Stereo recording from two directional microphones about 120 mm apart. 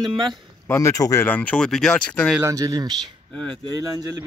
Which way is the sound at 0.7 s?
20° left (ahead or behind).